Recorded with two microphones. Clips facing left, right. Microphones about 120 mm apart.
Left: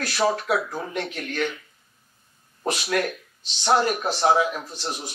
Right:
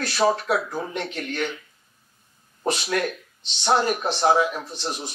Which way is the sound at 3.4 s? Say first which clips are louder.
Even; 25° right (ahead or behind).